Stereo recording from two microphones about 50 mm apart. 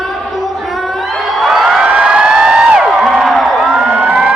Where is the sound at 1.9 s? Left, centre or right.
Right.